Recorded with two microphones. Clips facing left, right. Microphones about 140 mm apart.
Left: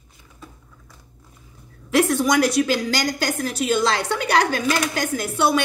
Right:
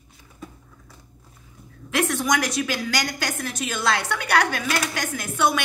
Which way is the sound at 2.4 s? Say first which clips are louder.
Left 7 dB; 30° left (ahead or behind).